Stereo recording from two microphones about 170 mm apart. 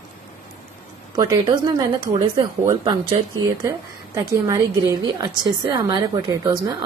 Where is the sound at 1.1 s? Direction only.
20° right (ahead or behind).